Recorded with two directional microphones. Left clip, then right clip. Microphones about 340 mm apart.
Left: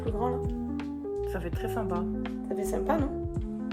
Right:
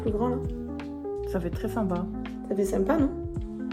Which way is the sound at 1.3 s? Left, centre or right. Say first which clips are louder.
Right 2 dB; right.